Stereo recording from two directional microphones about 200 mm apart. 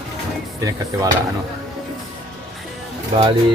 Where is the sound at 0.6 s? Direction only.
15° right (ahead or behind).